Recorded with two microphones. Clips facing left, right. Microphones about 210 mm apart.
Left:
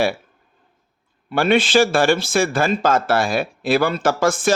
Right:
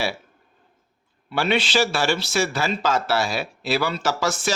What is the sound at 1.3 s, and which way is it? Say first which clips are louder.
Speech: left 6 dB; 50° left (ahead or behind).